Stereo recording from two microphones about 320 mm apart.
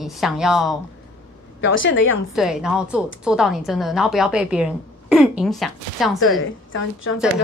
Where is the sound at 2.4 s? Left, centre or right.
Centre.